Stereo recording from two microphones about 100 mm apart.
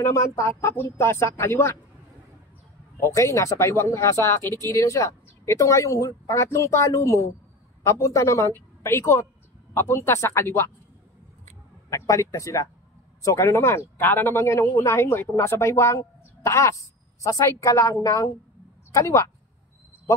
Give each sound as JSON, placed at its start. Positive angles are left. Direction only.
{"t": 0.0, "sound": "speech", "side_deg": 30}
{"t": 3.0, "sound": "speech", "side_deg": 30}
{"t": 11.9, "sound": "a woman's voice", "side_deg": 30}